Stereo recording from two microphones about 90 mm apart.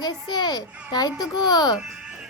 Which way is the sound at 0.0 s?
55° left (ahead or behind).